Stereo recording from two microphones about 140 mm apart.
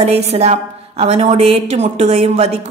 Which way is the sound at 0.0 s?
50° right (ahead or behind).